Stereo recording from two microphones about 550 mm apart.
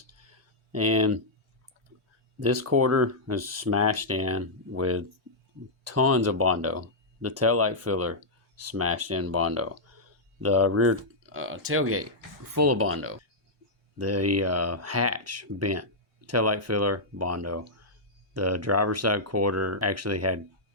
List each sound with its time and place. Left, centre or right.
0.7 s speech: right
2.4 s speech: right